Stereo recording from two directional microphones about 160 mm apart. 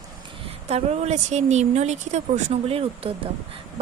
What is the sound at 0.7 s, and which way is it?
A woman's voice, 40° right (ahead or behind).